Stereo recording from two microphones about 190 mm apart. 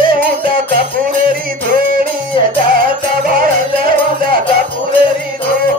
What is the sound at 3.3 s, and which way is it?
Music, 50° right (ahead or behind).